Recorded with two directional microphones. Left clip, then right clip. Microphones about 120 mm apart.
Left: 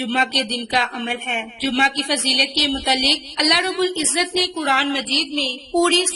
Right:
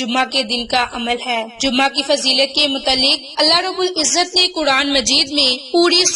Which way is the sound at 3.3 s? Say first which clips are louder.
Right 4 dB; 20° right (ahead or behind).